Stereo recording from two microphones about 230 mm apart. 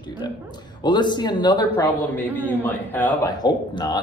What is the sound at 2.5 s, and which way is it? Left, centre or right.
Speech, centre.